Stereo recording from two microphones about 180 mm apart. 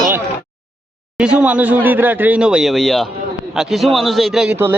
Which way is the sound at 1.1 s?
5° right (ahead or behind).